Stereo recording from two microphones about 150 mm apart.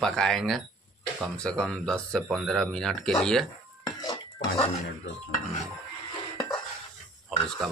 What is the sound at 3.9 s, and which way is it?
Cutlery, 25° left (ahead or behind).